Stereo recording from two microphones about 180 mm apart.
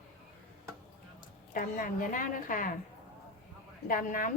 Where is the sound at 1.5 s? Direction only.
50° left (ahead or behind).